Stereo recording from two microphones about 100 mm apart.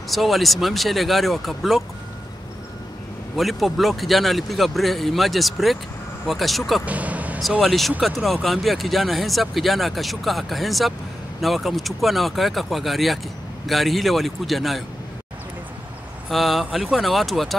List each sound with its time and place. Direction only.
0.1 s speech: centre (ahead or behind)
3.3 s speech: centre (ahead or behind)
6.9 s vehicle: 15° right (ahead or behind)
7.6 s speech: centre (ahead or behind)
16.3 s speech: centre (ahead or behind)